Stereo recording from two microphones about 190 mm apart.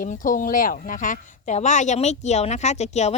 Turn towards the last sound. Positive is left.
turn(degrees=35)  # may be behind; listen again after turning